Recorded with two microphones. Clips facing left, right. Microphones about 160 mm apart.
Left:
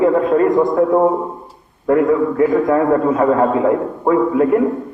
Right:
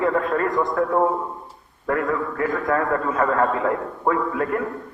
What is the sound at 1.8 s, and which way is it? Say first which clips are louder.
A man's voice: left 9 dB; 20° left (ahead or behind).